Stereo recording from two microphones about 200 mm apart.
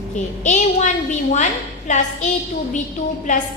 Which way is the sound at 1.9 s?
35° left (ahead or behind).